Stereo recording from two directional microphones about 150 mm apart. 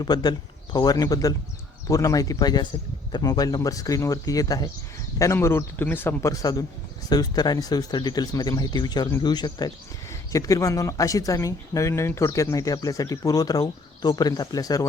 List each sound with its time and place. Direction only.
0.0 s a man's voice: 30° left (ahead or behind)